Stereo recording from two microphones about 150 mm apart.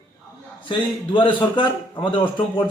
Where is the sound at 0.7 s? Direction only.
35° left (ahead or behind).